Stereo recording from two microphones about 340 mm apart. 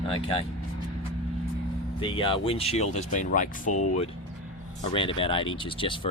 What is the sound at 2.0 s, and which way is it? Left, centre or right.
Speech, centre.